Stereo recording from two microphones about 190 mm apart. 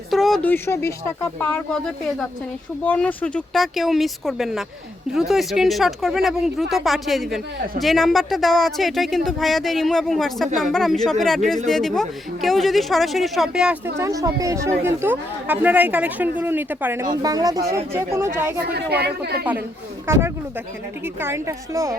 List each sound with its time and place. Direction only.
0.1 s speech: centre (ahead or behind)
14.0 s a woman's voice: 15° right (ahead or behind)
18.7 s speech: 60° right (ahead or behind)
20.1 s a woman's voice: 15° right (ahead or behind)